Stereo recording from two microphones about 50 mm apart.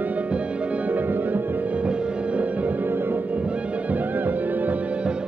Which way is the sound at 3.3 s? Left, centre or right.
Right.